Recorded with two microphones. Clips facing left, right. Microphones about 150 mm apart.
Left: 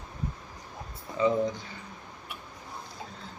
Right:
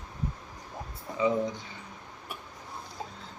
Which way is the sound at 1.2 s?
10° right (ahead or behind).